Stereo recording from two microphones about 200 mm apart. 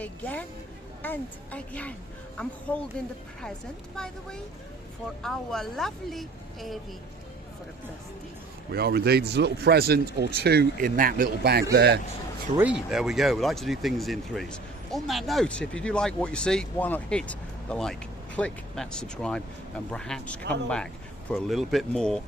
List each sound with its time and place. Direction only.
0.0 s a woman's voice: 10° left (ahead or behind)
3.9 s speech: 5° left (ahead or behind)
8.7 s speech: 55° right (ahead or behind)
12.5 s speech: 5° right (ahead or behind)